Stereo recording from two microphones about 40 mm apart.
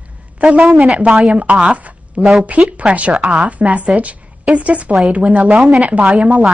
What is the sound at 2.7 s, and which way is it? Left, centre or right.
A woman's voice, right.